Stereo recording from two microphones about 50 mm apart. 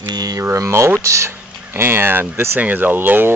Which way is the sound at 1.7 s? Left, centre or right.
Right.